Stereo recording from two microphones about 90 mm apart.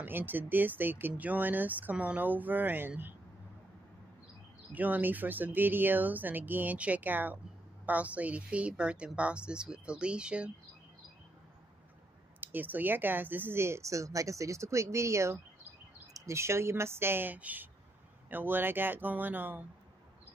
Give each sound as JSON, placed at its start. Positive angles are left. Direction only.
{"t": 0.0, "sound": "speech", "side_deg": -20}
{"t": 4.7, "sound": "a woman's voice", "side_deg": -20}
{"t": 12.4, "sound": "speech", "side_deg": -20}